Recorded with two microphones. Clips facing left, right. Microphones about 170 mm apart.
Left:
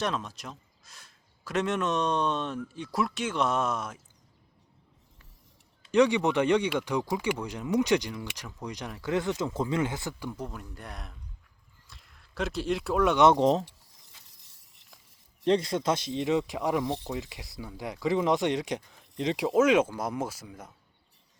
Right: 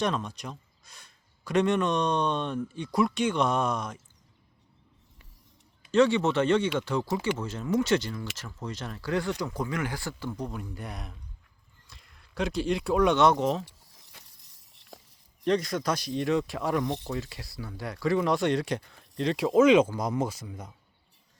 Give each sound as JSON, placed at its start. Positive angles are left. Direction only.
{"t": 0.0, "sound": "speech", "side_deg": 0}
{"t": 5.9, "sound": "speech", "side_deg": 15}
{"t": 11.9, "sound": "a sound", "side_deg": 0}
{"t": 13.3, "sound": "speech", "side_deg": 35}
{"t": 15.4, "sound": "speech", "side_deg": 25}
{"t": 19.5, "sound": "speech", "side_deg": 5}